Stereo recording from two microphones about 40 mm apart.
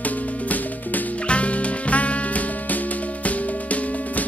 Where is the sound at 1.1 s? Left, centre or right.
Left.